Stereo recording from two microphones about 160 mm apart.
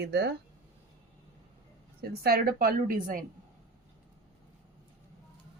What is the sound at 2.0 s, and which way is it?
Speech, 70° right (ahead or behind).